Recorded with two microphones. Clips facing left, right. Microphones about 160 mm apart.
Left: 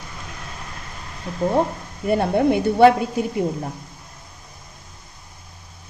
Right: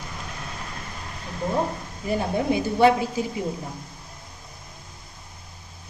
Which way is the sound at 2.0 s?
65° left (ahead or behind).